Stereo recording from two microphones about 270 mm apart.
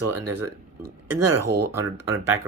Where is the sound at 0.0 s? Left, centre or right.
Right.